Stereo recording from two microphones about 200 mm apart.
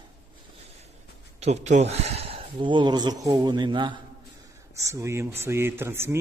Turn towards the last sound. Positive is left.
turn(degrees=-10)  # may be behind; listen again after turning